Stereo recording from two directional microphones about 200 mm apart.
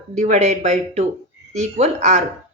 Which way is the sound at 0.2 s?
35° right (ahead or behind).